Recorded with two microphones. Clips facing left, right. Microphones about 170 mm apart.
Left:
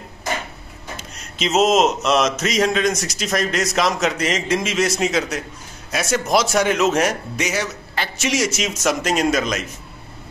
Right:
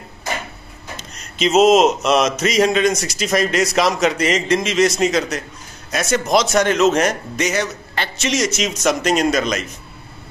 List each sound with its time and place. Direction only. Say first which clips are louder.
0.9 s speech: right 3 dB; centre (ahead or behind)